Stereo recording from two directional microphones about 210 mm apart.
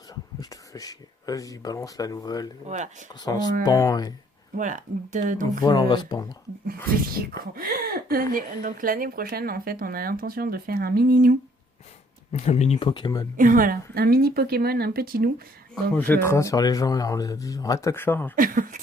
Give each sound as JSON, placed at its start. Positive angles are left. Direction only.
{"t": 0.3, "sound": "speech", "side_deg": 15}
{"t": 2.6, "sound": "speech", "side_deg": -35}
{"t": 3.1, "sound": "speech", "side_deg": 20}
{"t": 4.5, "sound": "speech", "side_deg": -35}
{"t": 5.6, "sound": "speech", "side_deg": 20}
{"t": 7.2, "sound": "a woman's voice", "side_deg": -45}
{"t": 12.3, "sound": "speech", "side_deg": 30}
{"t": 13.3, "sound": "a woman's voice", "side_deg": -40}
{"t": 15.7, "sound": "speech", "side_deg": 10}
{"t": 18.3, "sound": "speech", "side_deg": -40}